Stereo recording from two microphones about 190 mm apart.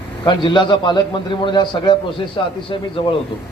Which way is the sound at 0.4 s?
25° left (ahead or behind).